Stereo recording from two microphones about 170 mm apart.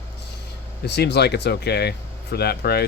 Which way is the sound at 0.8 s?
80° left.